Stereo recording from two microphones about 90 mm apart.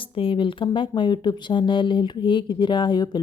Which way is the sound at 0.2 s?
75° left (ahead or behind).